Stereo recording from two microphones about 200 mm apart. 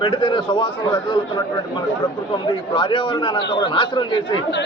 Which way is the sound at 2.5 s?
25° left (ahead or behind).